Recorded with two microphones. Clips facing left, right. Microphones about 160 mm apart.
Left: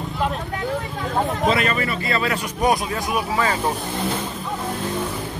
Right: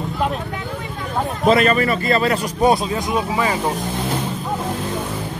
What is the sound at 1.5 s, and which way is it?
Speech, 40° right (ahead or behind).